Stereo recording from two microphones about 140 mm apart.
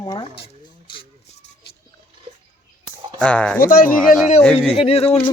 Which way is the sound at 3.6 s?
85° left.